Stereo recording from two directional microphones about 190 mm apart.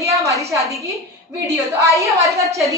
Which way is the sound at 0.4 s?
15° right (ahead or behind).